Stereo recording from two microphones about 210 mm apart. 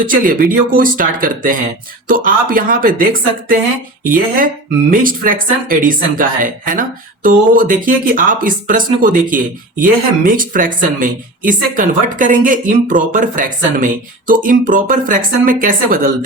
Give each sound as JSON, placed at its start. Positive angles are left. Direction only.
{"t": 0.0, "sound": "a woman's voice", "side_deg": -40}